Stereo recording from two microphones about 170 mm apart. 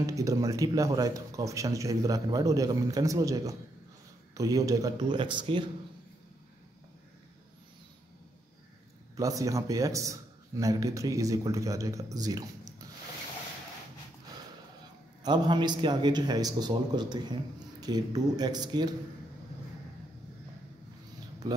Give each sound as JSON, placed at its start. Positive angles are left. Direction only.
{"t": 0.0, "sound": "a man's voice", "side_deg": -20}
{"t": 9.1, "sound": "a man's voice", "side_deg": -20}
{"t": 15.2, "sound": "a man's voice", "side_deg": -25}